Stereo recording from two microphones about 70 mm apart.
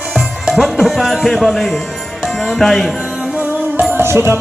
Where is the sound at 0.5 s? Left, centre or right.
Centre.